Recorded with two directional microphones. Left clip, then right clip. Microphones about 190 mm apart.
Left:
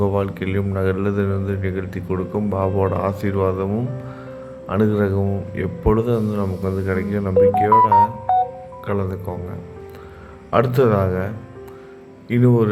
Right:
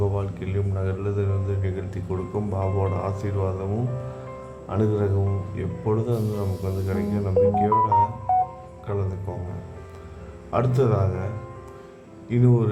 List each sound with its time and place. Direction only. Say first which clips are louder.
0.0 s a man's voice: left 7 dB; 20° left (ahead or behind)
4.7 s a man's voice: left 5 dB; 15° left (ahead or behind)
10.8 s a man's voice: left 7 dB; 15° left (ahead or behind)
12.3 s a man's voice: left 6 dB; 15° left (ahead or behind)